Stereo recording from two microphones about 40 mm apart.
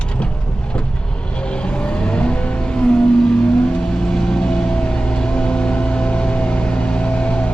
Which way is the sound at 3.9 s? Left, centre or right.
Centre.